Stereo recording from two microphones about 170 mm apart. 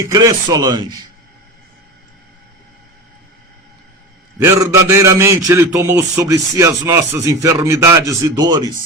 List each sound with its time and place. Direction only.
0.1 s speech: 20° right (ahead or behind)
4.4 s a man's voice: 15° right (ahead or behind)